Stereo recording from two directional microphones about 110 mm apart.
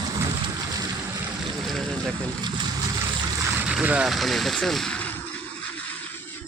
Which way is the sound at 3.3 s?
25° right (ahead or behind).